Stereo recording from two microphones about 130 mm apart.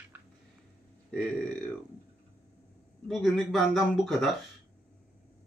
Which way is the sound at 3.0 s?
Centre (ahead or behind).